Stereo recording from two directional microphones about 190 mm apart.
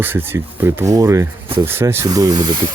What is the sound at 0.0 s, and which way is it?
Speech, 10° right (ahead or behind).